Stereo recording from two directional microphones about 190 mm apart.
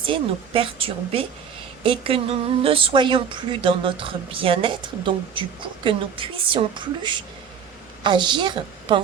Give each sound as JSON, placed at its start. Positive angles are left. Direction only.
{"t": 0.0, "sound": "a woman's voice", "side_deg": -25}